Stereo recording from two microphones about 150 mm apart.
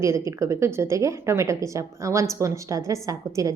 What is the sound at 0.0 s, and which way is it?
A woman's voice, 20° right (ahead or behind).